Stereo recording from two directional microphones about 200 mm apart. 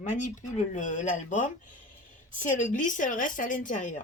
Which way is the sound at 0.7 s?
40° left (ahead or behind).